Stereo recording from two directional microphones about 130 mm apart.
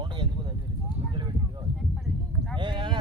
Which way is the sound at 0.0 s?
40° right (ahead or behind).